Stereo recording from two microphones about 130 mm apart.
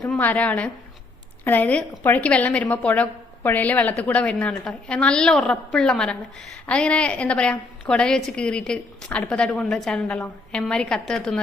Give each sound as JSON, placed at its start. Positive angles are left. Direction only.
{"t": 0.1, "sound": "a woman's voice", "side_deg": 10}